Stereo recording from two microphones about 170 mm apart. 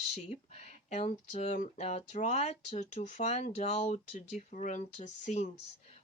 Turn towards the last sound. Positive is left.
turn(degrees=45)  # may be behind; listen again after turning